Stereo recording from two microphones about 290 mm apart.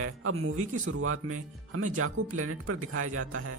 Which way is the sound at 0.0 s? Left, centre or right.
Right.